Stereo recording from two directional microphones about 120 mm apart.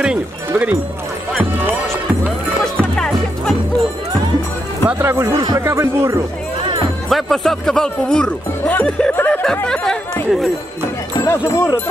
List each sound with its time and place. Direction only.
0.0 s speech: 10° right (ahead or behind)
2.6 s music: 5° left (ahead or behind)
4.8 s speech: 20° right (ahead or behind)
7.1 s speech: centre (ahead or behind)
11.2 s speech: 25° left (ahead or behind)